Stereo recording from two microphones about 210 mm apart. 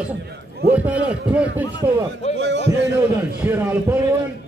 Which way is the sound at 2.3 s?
55° right (ahead or behind).